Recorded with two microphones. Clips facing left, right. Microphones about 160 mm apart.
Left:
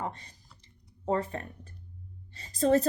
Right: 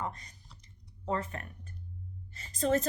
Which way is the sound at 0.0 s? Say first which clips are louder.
Left 2 dB; 30° left (ahead or behind).